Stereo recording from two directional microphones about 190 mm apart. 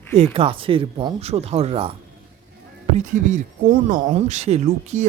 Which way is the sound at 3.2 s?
40° right (ahead or behind).